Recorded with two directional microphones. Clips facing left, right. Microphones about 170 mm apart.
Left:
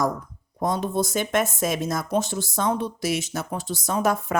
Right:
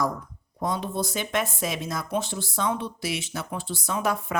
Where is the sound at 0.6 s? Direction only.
45° left (ahead or behind).